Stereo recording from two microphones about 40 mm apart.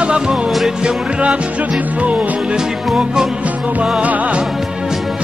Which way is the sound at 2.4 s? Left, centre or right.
Centre.